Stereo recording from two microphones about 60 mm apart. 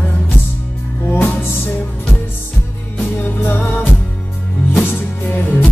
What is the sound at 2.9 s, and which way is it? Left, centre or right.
Music, left.